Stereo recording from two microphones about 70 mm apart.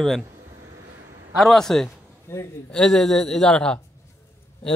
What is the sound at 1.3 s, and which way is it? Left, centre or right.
Speech, centre.